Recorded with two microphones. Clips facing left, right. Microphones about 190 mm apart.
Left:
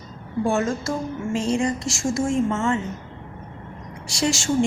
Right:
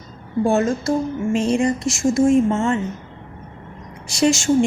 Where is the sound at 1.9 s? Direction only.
20° right (ahead or behind).